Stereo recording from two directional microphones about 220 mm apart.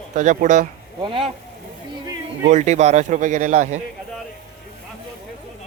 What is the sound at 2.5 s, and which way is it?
Speech, 30° right (ahead or behind).